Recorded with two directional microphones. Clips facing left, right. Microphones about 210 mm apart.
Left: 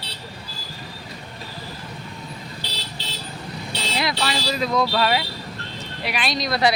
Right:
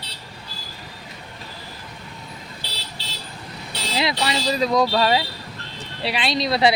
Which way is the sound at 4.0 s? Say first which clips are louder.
Right 2 dB; 25° right (ahead or behind).